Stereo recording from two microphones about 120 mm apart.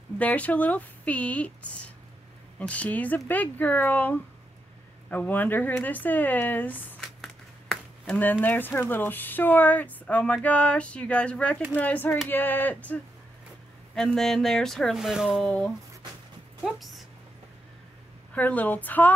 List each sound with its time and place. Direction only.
0.2 s speech: 15° left (ahead or behind)
7.0 s speech: 5° left (ahead or behind)
16.6 s speech: centre (ahead or behind)
18.3 s speech: 15° left (ahead or behind)